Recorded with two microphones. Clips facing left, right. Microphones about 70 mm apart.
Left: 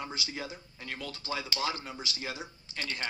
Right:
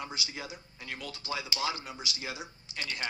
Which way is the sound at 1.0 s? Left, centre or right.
Left.